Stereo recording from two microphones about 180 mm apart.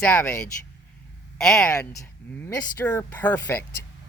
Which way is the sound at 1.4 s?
Centre (ahead or behind).